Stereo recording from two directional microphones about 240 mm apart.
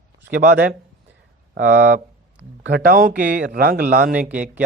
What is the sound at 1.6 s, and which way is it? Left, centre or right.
Speech, right.